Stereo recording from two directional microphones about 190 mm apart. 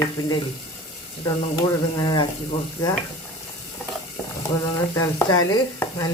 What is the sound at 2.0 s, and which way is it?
Sizzle, 25° left (ahead or behind).